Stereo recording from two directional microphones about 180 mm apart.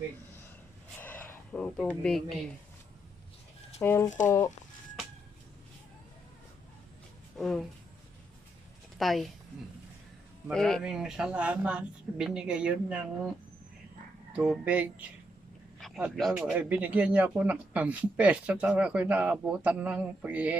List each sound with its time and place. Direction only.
0.9 s a sound: 10° left (ahead or behind)
3.8 s speech: 15° left (ahead or behind)
7.3 s speech: centre (ahead or behind)
9.0 s speech: centre (ahead or behind)
10.5 s speech: 5° left (ahead or behind)
14.3 s speech: 5° right (ahead or behind)
15.8 s a sound: 5° left (ahead or behind)
16.1 s speech: centre (ahead or behind)